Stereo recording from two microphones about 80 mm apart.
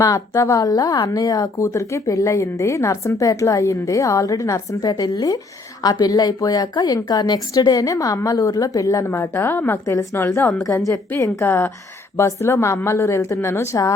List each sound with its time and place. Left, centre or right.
0.0 s a woman's voice: left
9.0 s a woman's voice: left
9.8 s a woman's voice: left
10.2 s a woman's voice: left